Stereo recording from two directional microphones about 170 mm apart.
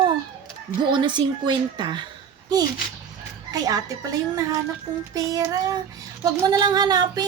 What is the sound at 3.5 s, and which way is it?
Speech, 20° right (ahead or behind).